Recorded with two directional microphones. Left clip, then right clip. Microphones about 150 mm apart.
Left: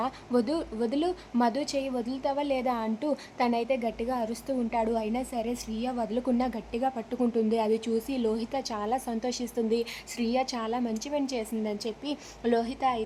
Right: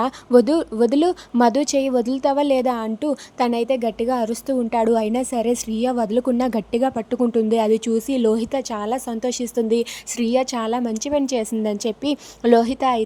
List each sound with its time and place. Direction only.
0.0 s speech: 45° right (ahead or behind)